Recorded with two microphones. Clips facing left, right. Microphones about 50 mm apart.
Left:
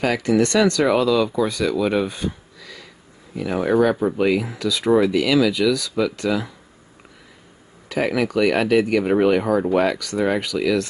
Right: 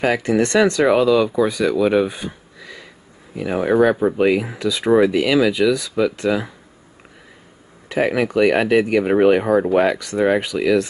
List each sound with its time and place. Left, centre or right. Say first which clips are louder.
0.0 s speech: right 1 dB; right
7.9 s speech: right 2 dB; right